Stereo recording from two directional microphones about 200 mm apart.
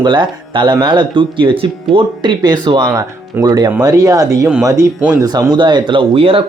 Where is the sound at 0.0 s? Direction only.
20° right (ahead or behind).